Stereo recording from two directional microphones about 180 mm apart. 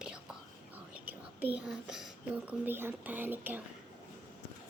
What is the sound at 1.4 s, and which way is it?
A woman's voice, 10° right (ahead or behind).